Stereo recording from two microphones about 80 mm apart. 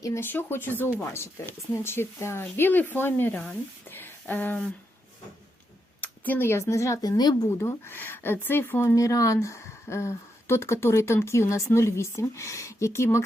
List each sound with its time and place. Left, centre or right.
0.0 s speech: left
6.0 s speech: left
7.6 s speech: left
9.0 s speech: left